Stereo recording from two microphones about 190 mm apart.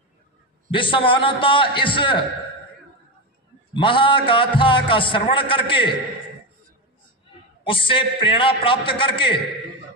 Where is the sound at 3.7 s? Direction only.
25° left (ahead or behind).